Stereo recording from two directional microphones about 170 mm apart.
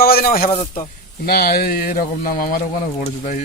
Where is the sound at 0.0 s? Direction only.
60° left (ahead or behind).